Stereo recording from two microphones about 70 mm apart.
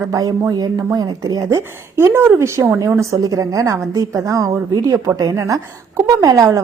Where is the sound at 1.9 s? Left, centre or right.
Right.